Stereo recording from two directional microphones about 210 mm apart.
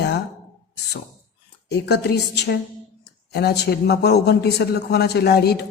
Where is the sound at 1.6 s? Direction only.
50° left (ahead or behind).